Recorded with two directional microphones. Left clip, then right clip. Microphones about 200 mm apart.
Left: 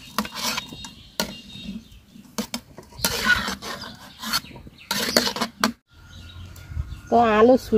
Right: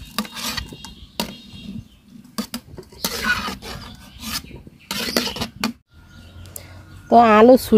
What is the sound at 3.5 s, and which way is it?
Filing, 15° right (ahead or behind).